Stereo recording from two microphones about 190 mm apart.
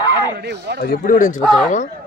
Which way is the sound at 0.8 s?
50° left (ahead or behind).